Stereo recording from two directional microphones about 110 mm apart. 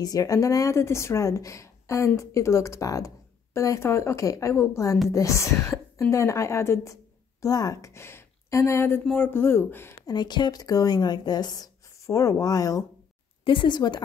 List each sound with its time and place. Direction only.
0.0 s a woman's voice: 35° left (ahead or behind)
10.0 s speech: 40° left (ahead or behind)
13.4 s speech: 50° left (ahead or behind)